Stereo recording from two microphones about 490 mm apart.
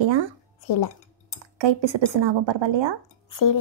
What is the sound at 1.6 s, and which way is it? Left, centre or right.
A woman's voice, right.